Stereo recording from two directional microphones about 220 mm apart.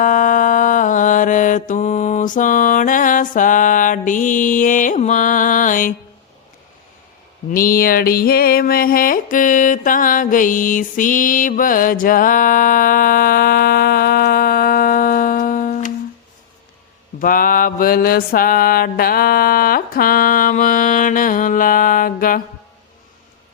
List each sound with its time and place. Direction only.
0.0 s mantra: 35° left (ahead or behind)
7.5 s a sound: 40° left (ahead or behind)
17.2 s mantra: 40° left (ahead or behind)